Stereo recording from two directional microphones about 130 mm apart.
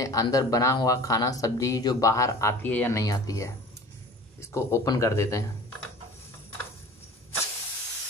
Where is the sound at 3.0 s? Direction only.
25° left (ahead or behind).